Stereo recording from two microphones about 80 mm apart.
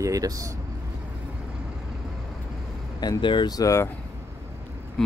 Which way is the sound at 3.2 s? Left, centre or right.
Left.